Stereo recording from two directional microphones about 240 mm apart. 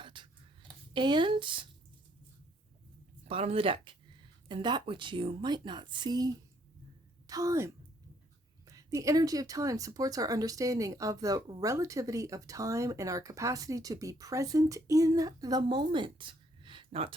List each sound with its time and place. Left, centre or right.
0.0 s a sound: centre
0.9 s speech: centre
3.2 s a woman's voice: right